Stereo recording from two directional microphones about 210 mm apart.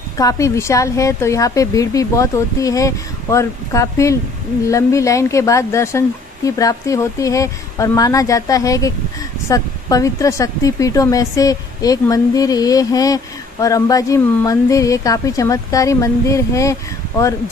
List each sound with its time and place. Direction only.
0.2 s speech: 15° left (ahead or behind)